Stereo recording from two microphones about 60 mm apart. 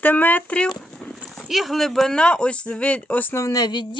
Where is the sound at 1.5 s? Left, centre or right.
Centre; by 3.3 s left.